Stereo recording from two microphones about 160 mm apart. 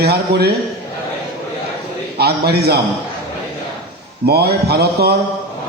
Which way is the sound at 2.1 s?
90° right.